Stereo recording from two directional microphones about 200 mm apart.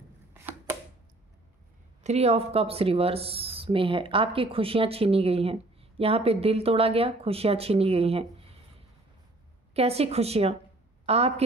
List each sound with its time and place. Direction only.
2.0 s speech: 30° right (ahead or behind)
9.8 s a woman's voice: 30° right (ahead or behind)